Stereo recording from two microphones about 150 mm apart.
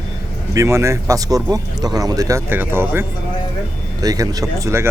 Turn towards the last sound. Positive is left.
turn(degrees=-20)  # may be behind; listen again after turning